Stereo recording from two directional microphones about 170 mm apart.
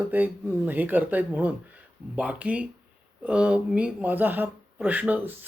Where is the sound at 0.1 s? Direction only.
10° right (ahead or behind).